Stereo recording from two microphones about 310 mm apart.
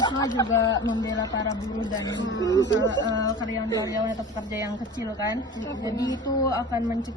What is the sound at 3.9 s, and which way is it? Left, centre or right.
Speech, centre.